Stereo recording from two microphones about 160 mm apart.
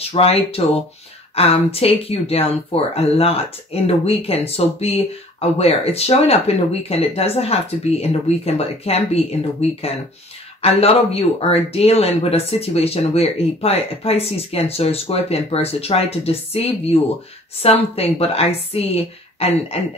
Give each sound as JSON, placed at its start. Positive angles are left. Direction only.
{"t": 0.1, "sound": "speech", "side_deg": 40}